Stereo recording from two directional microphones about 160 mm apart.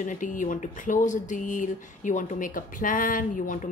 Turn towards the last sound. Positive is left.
turn(degrees=60)  # may be behind; listen again after turning